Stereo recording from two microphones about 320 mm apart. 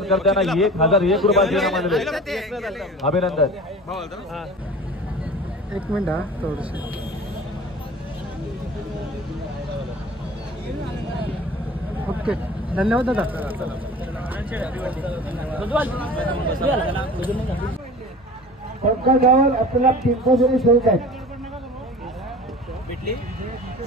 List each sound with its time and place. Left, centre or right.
0.0 s a man's voice: centre
5.7 s a man's voice: centre
12.2 s a man's voice: centre
19.0 s a man's voice: right
20.2 s a man's voice: centre